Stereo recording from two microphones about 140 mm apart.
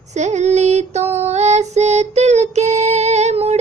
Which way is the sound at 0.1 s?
55° right (ahead or behind).